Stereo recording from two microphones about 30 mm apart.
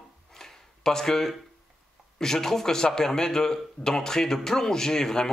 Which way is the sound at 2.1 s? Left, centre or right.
Centre.